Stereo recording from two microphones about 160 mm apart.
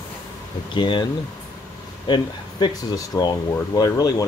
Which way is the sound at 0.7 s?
30° left (ahead or behind).